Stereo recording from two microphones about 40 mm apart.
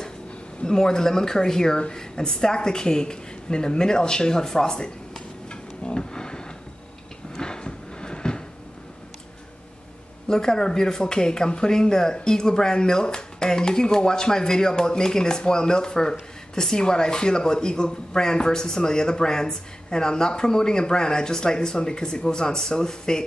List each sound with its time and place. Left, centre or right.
0.6 s speech: centre
5.5 s a sound: left
10.2 s speech: centre